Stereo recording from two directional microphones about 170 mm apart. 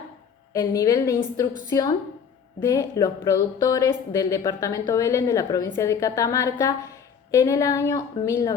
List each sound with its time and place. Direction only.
0.5 s speech: 20° left (ahead or behind)